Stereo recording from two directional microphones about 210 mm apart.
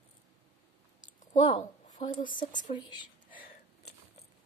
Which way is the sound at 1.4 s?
20° left (ahead or behind).